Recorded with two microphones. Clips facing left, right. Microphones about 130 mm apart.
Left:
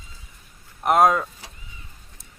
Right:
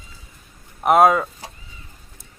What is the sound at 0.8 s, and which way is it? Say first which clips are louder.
Speech: right 3 dB; 5° right (ahead or behind).